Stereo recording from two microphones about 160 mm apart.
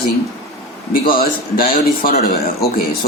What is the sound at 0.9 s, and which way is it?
Speech, 65° left (ahead or behind).